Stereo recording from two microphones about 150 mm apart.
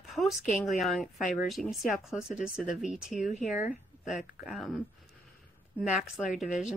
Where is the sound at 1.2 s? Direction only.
65° left (ahead or behind).